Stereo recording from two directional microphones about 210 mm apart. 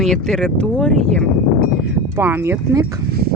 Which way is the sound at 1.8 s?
10° right (ahead or behind).